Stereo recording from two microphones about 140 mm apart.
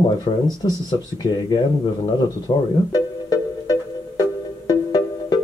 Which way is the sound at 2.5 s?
35° left (ahead or behind).